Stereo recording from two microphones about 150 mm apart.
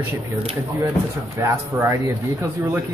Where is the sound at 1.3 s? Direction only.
15° right (ahead or behind).